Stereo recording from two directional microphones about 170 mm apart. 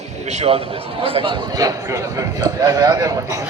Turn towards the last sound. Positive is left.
turn(degrees=-20)  # may be behind; listen again after turning